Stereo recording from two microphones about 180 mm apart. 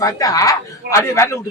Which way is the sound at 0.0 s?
20° left (ahead or behind).